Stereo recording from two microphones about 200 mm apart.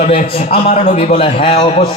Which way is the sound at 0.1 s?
30° left (ahead or behind).